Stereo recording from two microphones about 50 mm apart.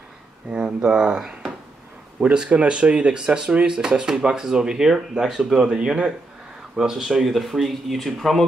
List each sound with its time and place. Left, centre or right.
0.5 s speech: right
2.3 s speech: centre